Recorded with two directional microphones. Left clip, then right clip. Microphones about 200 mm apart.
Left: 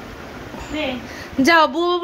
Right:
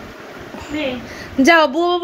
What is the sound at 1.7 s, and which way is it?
Speech, 15° left (ahead or behind).